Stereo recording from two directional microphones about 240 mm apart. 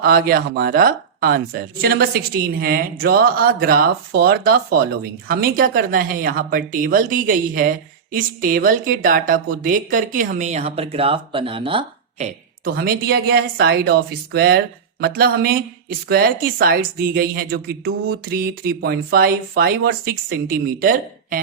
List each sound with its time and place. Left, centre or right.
0.0 s a woman's voice: right
12.6 s a woman's voice: right